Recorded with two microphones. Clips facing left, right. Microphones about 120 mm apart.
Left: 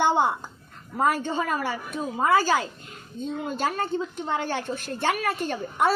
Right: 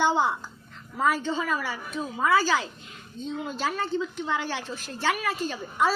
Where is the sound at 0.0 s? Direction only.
55° left (ahead or behind).